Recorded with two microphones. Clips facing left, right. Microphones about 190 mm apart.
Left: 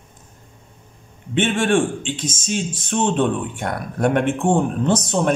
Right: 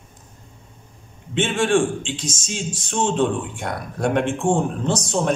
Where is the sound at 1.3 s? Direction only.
55° left (ahead or behind).